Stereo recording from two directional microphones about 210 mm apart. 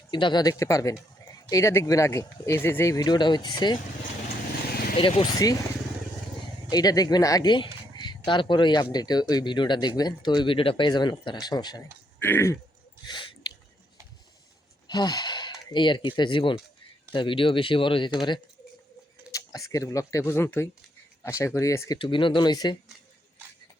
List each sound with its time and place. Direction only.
0.1 s speech: 20° left (ahead or behind)
4.9 s speech: 25° left (ahead or behind)
6.7 s speech: 20° left (ahead or behind)
13.1 s chewing: 20° left (ahead or behind)
14.8 s speech: 20° left (ahead or behind)
19.3 s a sound: 15° left (ahead or behind)
19.7 s speech: 15° left (ahead or behind)